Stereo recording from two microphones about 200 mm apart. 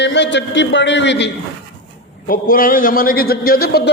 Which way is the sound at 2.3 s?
45° left (ahead or behind).